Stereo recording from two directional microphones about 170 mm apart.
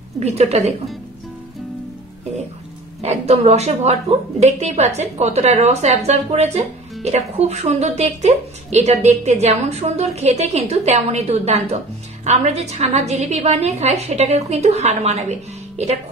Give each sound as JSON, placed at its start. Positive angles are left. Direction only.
{"t": 0.2, "sound": "a woman's voice", "side_deg": -40}
{"t": 3.0, "sound": "a woman's voice", "side_deg": -40}